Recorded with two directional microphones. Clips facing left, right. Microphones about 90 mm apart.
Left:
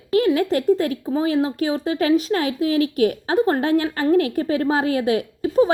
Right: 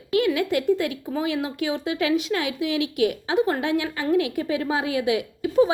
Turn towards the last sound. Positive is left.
turn(degrees=40)  # may be behind; listen again after turning